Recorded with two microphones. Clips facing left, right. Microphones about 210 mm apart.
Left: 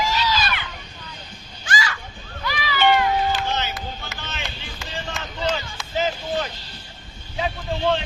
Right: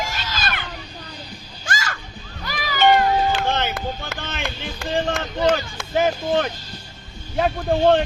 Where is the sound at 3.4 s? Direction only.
55° right (ahead or behind).